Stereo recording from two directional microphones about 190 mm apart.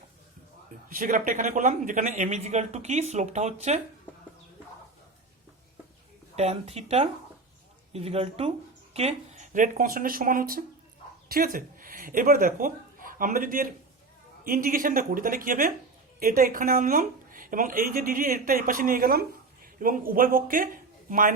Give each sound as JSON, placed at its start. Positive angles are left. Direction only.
{"t": 0.9, "sound": "speech", "side_deg": -45}
{"t": 6.3, "sound": "a woman's voice", "side_deg": -35}